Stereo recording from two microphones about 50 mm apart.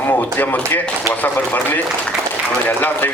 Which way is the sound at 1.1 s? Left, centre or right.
Right.